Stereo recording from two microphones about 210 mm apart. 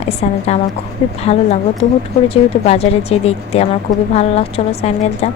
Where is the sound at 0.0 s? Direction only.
30° left (ahead or behind).